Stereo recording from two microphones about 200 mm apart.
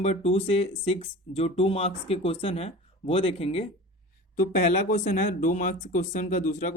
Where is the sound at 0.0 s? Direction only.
35° left (ahead or behind).